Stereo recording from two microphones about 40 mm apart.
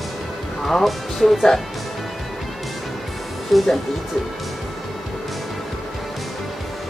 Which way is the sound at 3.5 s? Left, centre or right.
Centre.